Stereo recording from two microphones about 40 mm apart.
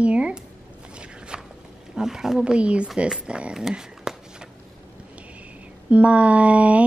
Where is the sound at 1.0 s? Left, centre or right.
Right.